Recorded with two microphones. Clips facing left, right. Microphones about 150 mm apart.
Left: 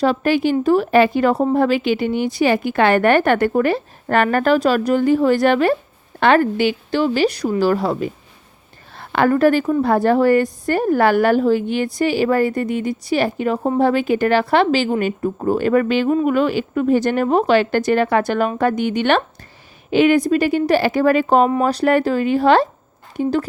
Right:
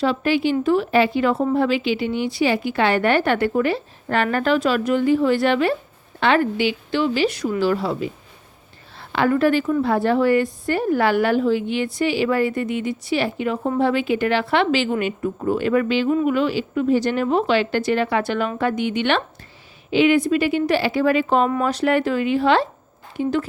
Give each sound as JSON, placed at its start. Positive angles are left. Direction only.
{"t": 0.0, "sound": "a woman's voice", "side_deg": 45}